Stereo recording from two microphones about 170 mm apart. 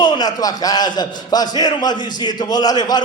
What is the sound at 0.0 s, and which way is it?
A man's voice, 25° left (ahead or behind).